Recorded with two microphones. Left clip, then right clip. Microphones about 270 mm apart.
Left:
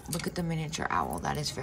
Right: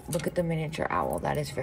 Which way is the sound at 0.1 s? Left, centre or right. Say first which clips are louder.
Right 6 dB; centre.